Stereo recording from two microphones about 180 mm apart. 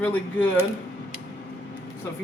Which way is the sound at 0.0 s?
10° left (ahead or behind).